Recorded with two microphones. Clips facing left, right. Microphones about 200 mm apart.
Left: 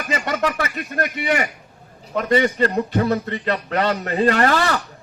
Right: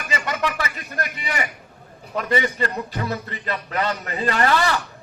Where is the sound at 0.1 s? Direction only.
45° left (ahead or behind).